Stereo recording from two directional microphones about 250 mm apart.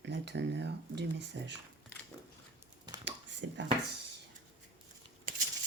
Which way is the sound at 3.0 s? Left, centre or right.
Right.